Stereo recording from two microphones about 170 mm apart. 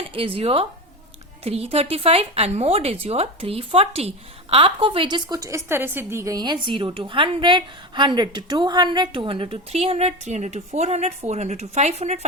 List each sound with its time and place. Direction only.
0.3 s a woman's voice: 35° right (ahead or behind)